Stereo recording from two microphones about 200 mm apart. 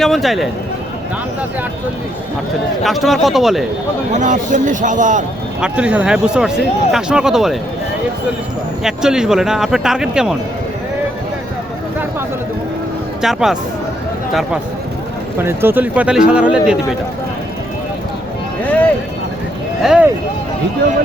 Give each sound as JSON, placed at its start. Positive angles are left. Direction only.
{"t": 0.0, "sound": "speech", "side_deg": 0}
{"t": 2.8, "sound": "speech", "side_deg": 0}
{"t": 4.1, "sound": "a man's voice", "side_deg": -40}
{"t": 5.5, "sound": "speech", "side_deg": -5}
{"t": 8.8, "sound": "speech", "side_deg": -5}
{"t": 13.2, "sound": "speech", "side_deg": 0}
{"t": 15.4, "sound": "speech", "side_deg": -10}
{"t": 19.8, "sound": "speech", "side_deg": 0}